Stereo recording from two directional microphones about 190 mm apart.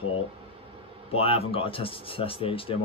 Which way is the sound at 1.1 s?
30° left (ahead or behind).